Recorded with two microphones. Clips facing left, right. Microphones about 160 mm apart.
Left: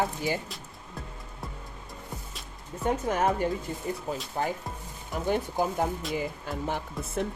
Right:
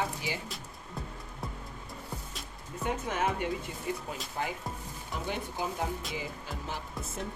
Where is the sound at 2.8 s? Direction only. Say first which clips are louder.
Left 5 dB; 40° left (ahead or behind).